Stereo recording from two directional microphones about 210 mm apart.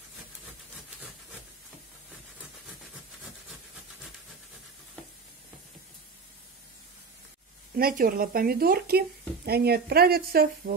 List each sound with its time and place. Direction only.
7.7 s speech: 45° right (ahead or behind)